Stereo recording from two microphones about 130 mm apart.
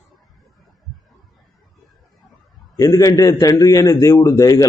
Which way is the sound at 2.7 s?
25° left (ahead or behind).